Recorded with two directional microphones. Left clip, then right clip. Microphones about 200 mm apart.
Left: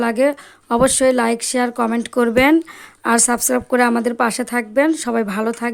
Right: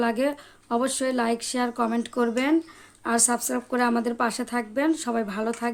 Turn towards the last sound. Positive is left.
turn(degrees=35)  # may be behind; listen again after turning